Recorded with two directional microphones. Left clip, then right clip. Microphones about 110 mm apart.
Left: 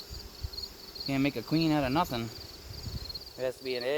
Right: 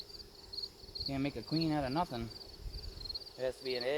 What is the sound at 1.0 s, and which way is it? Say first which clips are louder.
Cricket: left 8 dB; 50° left (ahead or behind).